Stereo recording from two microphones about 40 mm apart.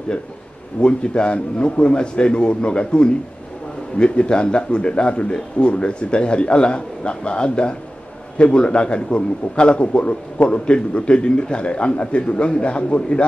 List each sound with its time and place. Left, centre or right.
0.7 s speech: left